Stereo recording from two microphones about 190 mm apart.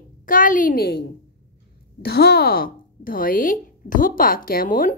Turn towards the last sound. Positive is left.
turn(degrees=45)  # may be behind; listen again after turning